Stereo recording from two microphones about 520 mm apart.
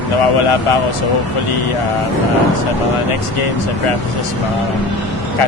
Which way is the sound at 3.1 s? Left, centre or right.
Left.